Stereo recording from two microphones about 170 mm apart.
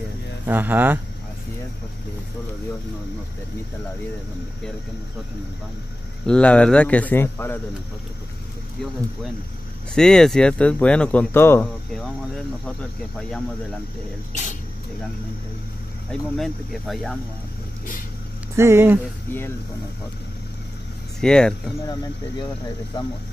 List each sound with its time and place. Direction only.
0.5 s speech: 10° right (ahead or behind)
6.2 s speech: 5° left (ahead or behind)
9.9 s speech: 5° left (ahead or behind)
11.9 s speech: 5° left (ahead or behind)
14.3 s speech: 45° left (ahead or behind)
16.1 s speech: 5° left (ahead or behind)
18.6 s speech: 15° right (ahead or behind)
21.2 s speech: 5° left (ahead or behind)
21.8 s speech: 20° left (ahead or behind)